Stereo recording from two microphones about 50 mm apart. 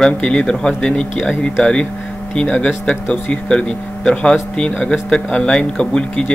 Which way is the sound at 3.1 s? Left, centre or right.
Centre.